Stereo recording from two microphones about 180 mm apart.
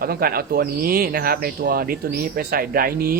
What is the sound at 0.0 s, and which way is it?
Speech, 55° right (ahead or behind).